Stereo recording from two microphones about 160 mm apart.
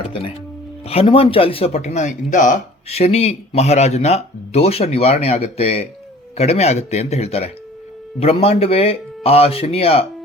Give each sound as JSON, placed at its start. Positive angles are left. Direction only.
{"t": 0.1, "sound": "speech", "side_deg": 35}